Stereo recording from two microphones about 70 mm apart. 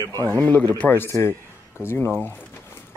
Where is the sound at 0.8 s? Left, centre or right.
Left.